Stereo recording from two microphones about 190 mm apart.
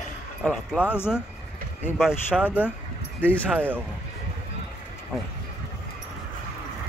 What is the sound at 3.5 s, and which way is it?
Speech, 10° right (ahead or behind).